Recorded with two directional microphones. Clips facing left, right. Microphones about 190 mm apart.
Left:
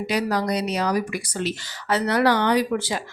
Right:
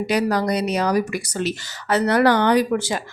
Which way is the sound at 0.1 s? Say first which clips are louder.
Right 3 dB; 50° right (ahead or behind).